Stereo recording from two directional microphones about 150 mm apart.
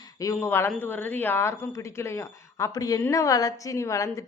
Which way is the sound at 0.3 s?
15° left (ahead or behind).